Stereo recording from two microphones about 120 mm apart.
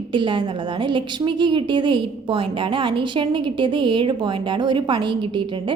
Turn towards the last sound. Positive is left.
turn(degrees=-40)  # may be behind; listen again after turning